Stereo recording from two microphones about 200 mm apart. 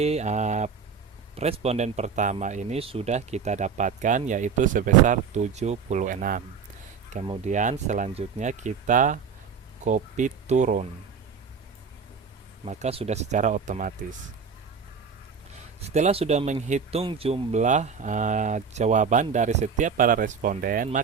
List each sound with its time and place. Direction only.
0.0 s speech: 35° right (ahead or behind)
12.6 s speech: 30° right (ahead or behind)
15.9 s speech: 35° right (ahead or behind)